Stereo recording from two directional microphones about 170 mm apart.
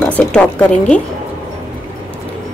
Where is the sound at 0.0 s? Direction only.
5° left (ahead or behind).